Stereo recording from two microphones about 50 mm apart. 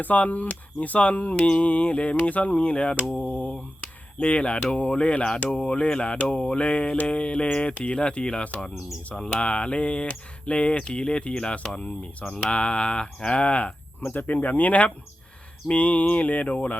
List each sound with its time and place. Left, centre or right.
0.0 s speech: left
7.7 s speech: left
7.9 s speech: centre
14.0 s speech: left